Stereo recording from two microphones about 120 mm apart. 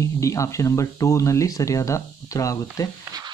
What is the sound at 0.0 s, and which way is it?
Speech, 25° left (ahead or behind).